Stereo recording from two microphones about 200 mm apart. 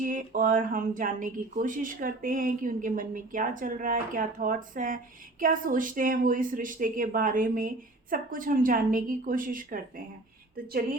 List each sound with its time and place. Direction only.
0.0 s speech: 40° right (ahead or behind)